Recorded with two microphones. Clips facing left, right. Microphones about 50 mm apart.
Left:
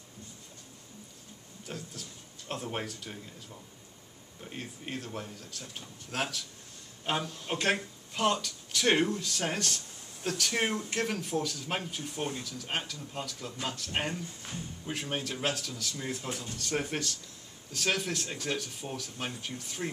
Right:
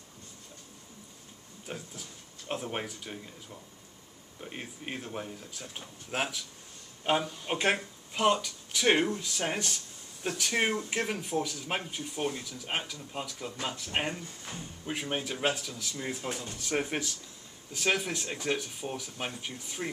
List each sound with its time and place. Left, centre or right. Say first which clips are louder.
1.7 s speech: right 1 dB; centre
4.4 s speech: right 1 dB; centre